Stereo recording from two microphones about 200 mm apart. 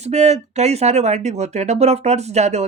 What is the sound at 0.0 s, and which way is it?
Speech, 35° right (ahead or behind).